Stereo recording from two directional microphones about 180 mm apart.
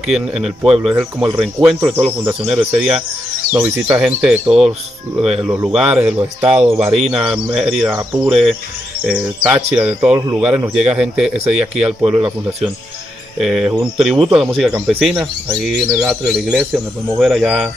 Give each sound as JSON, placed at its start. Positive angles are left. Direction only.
{"t": 0.0, "sound": "speech", "side_deg": 0}
{"t": 13.4, "sound": "speech", "side_deg": 0}